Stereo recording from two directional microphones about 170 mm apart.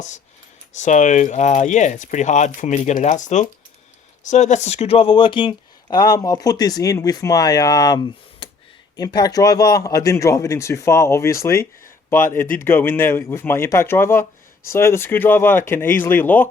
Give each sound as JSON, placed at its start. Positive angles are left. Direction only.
{"t": 0.8, "sound": "speech", "side_deg": 45}